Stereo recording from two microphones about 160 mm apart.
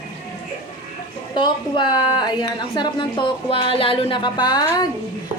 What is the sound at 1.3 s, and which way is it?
A woman's voice, 30° left (ahead or behind).